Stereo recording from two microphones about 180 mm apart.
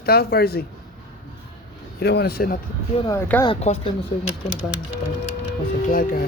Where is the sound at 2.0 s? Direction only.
65° left (ahead or behind).